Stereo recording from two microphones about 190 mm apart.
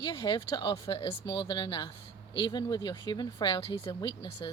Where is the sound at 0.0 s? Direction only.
20° left (ahead or behind).